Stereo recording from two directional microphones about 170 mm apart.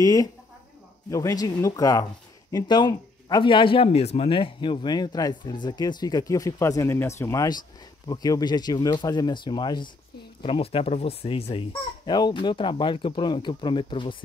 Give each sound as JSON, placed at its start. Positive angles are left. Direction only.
{"t": 0.0, "sound": "speech", "side_deg": 20}